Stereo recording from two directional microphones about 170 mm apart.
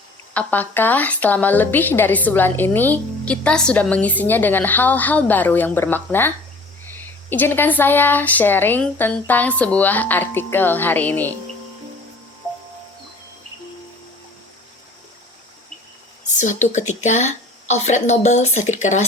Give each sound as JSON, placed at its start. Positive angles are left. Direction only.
{"t": 0.3, "sound": "a woman's voice", "side_deg": 10}
{"t": 16.4, "sound": "a woman's voice", "side_deg": 45}